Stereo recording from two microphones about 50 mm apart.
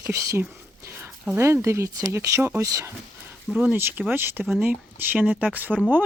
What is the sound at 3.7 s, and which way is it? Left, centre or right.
Speech, right.